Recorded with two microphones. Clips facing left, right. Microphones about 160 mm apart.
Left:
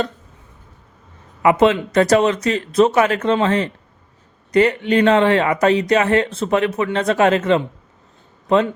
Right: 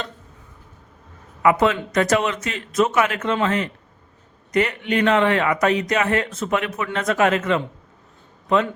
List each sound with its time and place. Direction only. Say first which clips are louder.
1.4 s speech: left 4 dB; 25° left (ahead or behind)